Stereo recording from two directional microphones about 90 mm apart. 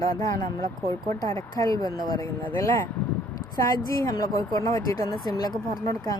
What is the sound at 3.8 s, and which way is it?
Speech, 40° left (ahead or behind).